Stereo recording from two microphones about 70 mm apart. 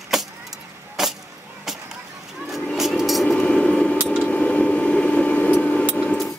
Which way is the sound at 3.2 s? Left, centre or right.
Centre.